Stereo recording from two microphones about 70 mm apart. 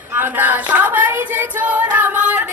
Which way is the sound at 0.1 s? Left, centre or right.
Right.